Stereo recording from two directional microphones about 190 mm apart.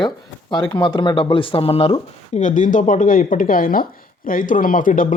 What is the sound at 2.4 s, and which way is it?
Speech, 40° left (ahead or behind).